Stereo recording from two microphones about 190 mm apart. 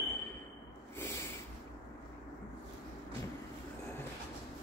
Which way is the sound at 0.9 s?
10° left (ahead or behind).